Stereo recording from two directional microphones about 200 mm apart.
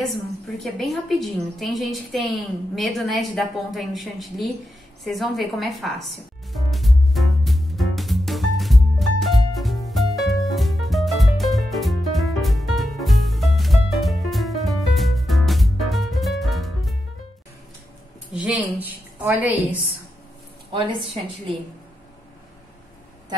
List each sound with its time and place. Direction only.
0.1 s a woman's voice: centre (ahead or behind)
6.5 s music: centre (ahead or behind)
18.3 s a woman's voice: 5° right (ahead or behind)
20.7 s a woman's voice: 25° right (ahead or behind)